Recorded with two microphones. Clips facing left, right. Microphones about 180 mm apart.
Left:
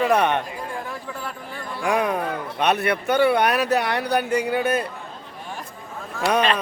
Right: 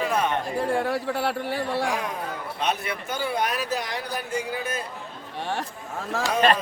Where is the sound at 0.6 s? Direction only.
80° right.